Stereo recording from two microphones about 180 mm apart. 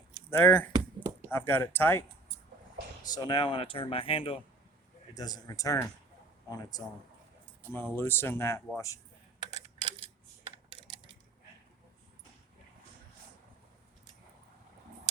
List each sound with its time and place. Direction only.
0.3 s speech: 10° left (ahead or behind)
3.0 s speech: 20° left (ahead or behind)
5.1 s speech: 20° left (ahead or behind)